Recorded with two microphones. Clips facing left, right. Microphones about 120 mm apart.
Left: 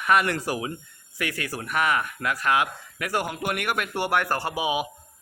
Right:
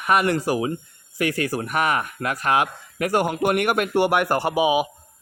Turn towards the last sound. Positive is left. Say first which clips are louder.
# right 7 dB
turn(degrees=-10)  # may be behind; listen again after turning